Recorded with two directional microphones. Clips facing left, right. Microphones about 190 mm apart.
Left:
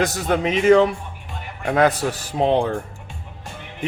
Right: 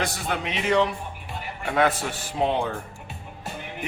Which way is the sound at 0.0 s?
45° left (ahead or behind).